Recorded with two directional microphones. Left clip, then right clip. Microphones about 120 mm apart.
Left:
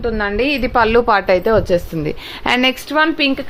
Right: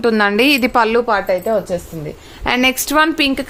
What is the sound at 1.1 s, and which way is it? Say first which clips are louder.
Speech: left 2 dB; 35° left (ahead or behind).